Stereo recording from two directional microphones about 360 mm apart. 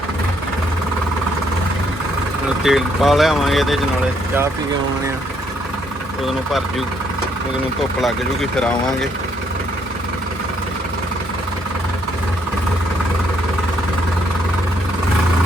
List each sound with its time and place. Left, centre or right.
2.6 s speech: centre
8.0 s speech: centre